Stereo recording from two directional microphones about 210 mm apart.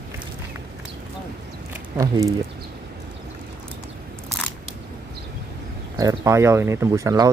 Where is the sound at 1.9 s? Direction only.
15° right (ahead or behind).